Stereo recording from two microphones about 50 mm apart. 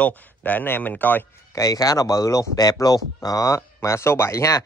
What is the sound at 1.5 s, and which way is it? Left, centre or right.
Speech, left.